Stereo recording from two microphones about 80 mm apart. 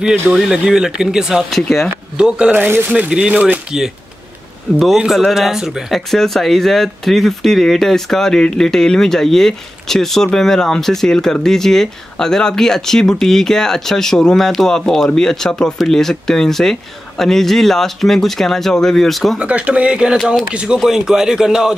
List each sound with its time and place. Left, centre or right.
0.3 s speech: centre
2.1 s speech: centre
3.1 s speech: centre
4.9 s speech: centre
19.3 s speech: centre